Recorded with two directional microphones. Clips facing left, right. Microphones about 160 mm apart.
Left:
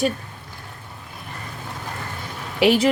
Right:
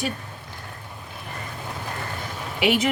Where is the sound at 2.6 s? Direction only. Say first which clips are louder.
Left 5 dB; 35° left (ahead or behind).